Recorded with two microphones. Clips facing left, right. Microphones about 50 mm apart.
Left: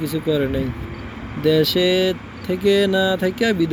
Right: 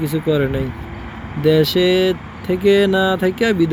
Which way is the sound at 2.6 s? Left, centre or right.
Centre.